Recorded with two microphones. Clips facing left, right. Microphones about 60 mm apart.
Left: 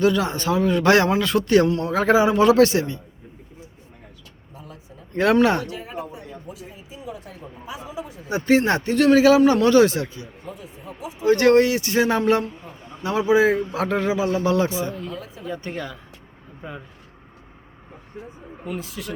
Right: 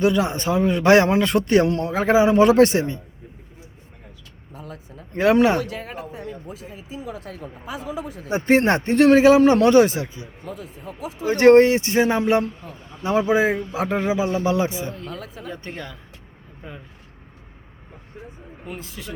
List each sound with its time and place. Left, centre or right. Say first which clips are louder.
0.0 s a man's voice: even; right
5.1 s speech: right 1 dB; centre
7.0 s speech: right 1 dB; right
8.3 s a man's voice: right 1 dB; right
11.3 s a man's voice: right 3 dB; right
13.0 s a man's voice: left 1 dB; right
15.1 s speech: even; right
15.7 s speech: left 4 dB; centre
18.9 s speech: left 3 dB; centre